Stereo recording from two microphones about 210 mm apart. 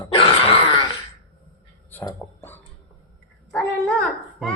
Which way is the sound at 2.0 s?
10° left (ahead or behind).